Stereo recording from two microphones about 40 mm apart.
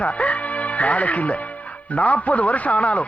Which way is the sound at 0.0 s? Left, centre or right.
Left.